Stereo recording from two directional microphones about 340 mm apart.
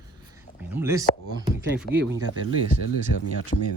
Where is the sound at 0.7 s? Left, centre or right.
Centre.